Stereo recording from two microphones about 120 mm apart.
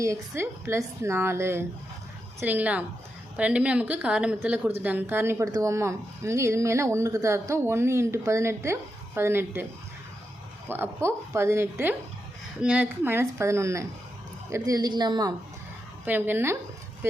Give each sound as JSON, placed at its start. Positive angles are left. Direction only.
{"t": 0.0, "sound": "a woman's voice", "side_deg": -25}
{"t": 10.7, "sound": "a woman's voice", "side_deg": -20}
{"t": 16.0, "sound": "a woman's voice", "side_deg": -15}